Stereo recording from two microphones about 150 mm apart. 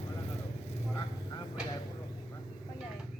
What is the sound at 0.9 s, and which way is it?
Vehicle, 30° left (ahead or behind).